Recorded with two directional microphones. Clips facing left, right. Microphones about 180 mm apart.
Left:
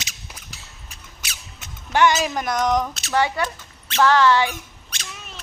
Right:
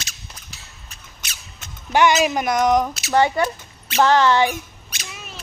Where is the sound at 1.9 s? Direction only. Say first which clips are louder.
Right 2 dB; 15° right (ahead or behind).